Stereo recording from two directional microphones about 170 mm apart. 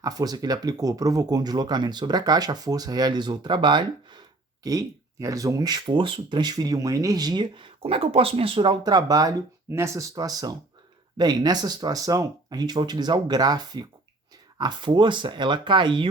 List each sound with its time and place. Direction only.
0.0 s speech: 20° right (ahead or behind)